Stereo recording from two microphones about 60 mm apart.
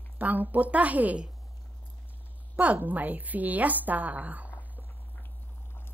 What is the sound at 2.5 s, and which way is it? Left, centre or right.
A woman's voice, right.